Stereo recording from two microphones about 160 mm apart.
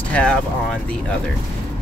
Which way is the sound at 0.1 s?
5° left (ahead or behind).